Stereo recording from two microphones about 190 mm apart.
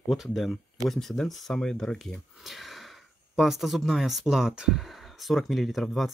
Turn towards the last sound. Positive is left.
turn(degrees=0)  # may be behind; listen again after turning